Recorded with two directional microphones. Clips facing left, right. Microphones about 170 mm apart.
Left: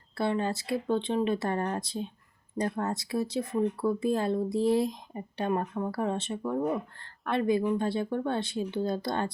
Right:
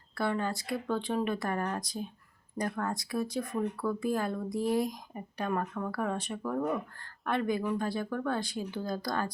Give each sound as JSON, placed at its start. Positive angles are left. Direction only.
{"t": 0.2, "sound": "speech", "side_deg": 25}